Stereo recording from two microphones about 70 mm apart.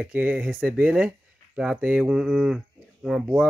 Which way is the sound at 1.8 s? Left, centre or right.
Right.